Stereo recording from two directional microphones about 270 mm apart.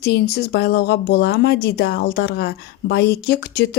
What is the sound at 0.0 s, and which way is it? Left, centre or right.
Speech, left.